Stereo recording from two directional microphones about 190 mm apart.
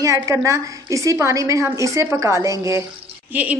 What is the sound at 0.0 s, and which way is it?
A woman's voice, 15° right (ahead or behind).